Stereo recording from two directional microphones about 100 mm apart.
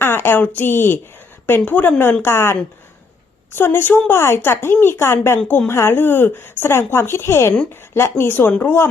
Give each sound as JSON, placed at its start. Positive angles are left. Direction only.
{"t": 0.0, "sound": "a woman's voice", "side_deg": 20}